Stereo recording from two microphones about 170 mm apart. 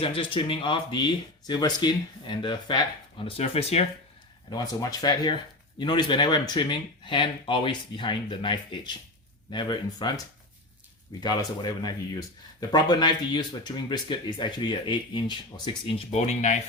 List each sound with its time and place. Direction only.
0.0 s speech: 30° left (ahead or behind)
4.4 s speech: 20° left (ahead or behind)
11.2 s speech: 25° left (ahead or behind)
16.1 s speech: 45° left (ahead or behind)